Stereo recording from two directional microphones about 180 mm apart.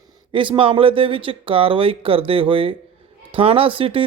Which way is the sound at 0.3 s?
30° right (ahead or behind).